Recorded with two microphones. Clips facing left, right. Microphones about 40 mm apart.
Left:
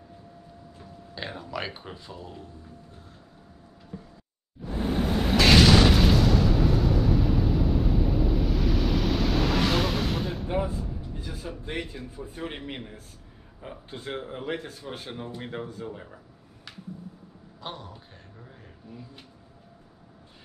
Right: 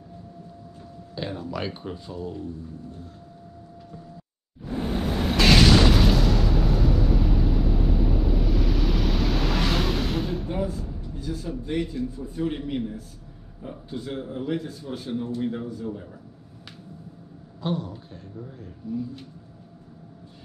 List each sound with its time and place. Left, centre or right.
1.1 s speech: centre
4.7 s boom: centre
10.5 s music: centre
10.8 s a sound: centre
11.1 s a man's voice: left
17.6 s a man's voice: centre
18.4 s speech: centre